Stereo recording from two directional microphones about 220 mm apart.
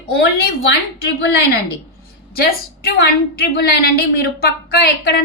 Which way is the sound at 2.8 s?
45° left (ahead or behind).